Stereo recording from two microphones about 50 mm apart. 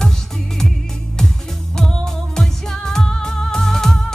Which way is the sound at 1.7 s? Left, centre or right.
Centre.